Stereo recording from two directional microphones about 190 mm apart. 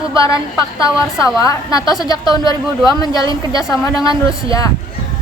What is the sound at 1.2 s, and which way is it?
A woman's voice, 20° left (ahead or behind).